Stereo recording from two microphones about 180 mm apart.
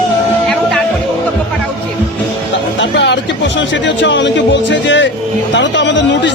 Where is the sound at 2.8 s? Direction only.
80° left.